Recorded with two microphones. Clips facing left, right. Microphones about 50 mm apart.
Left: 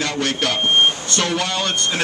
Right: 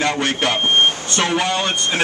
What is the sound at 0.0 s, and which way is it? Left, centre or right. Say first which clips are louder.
Speech: right 2 dB; right.